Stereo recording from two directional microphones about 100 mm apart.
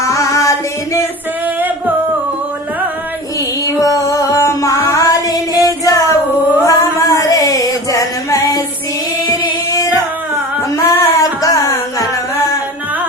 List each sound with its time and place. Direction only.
0.0 s music: 30° left (ahead or behind)
3.8 s music: 35° left (ahead or behind)
6.6 s a sound: 35° left (ahead or behind)
10.7 s music: 35° left (ahead or behind)